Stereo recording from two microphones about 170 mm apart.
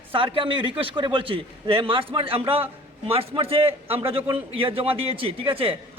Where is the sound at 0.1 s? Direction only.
30° right (ahead or behind).